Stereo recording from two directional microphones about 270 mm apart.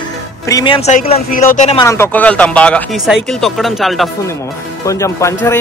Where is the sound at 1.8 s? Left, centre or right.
Centre.